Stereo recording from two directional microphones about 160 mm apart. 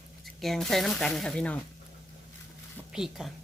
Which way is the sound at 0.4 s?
Centre (ahead or behind).